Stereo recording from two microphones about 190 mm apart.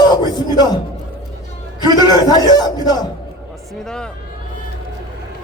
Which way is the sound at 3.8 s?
5° left (ahead or behind).